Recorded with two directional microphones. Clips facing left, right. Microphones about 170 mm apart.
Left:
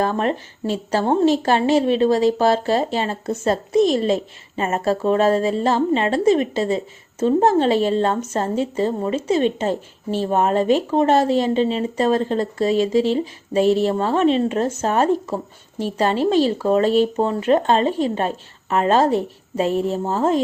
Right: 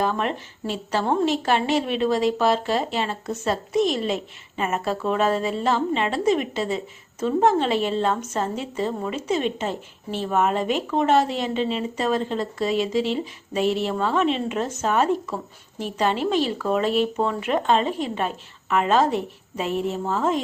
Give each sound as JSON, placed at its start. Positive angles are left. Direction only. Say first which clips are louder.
{"t": 0.0, "sound": "a woman's voice", "louder": "left 4 dB", "side_deg": 35}